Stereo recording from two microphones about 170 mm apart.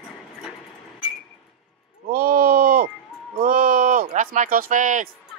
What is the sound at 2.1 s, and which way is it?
Speech, 60° right (ahead or behind).